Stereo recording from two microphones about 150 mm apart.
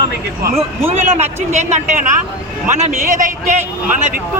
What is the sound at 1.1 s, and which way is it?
A man's voice, 45° right (ahead or behind).